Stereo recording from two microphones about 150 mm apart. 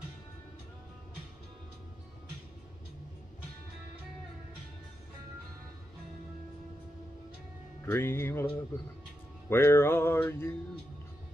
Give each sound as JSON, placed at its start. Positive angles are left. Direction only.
{"t": 7.8, "sound": "music", "side_deg": 15}